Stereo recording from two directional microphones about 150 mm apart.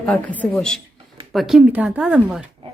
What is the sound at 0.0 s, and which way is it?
Speech, 10° left (ahead or behind).